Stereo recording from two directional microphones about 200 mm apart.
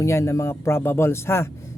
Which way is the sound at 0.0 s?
15° left (ahead or behind).